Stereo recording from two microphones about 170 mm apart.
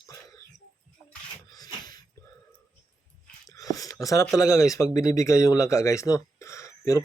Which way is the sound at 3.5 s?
20° left (ahead or behind).